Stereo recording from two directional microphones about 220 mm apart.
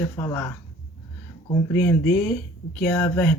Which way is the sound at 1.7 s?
10° left (ahead or behind).